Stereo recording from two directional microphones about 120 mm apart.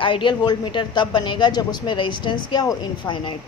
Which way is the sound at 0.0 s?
45° left (ahead or behind).